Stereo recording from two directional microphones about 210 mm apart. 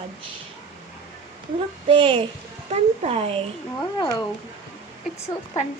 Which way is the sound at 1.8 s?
25° right (ahead or behind).